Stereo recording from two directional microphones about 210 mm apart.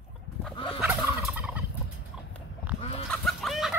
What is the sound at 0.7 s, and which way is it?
Gobble, 5° right (ahead or behind).